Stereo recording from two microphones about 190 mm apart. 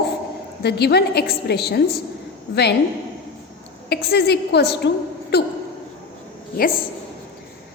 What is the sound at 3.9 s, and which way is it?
A woman's voice, 60° left (ahead or behind).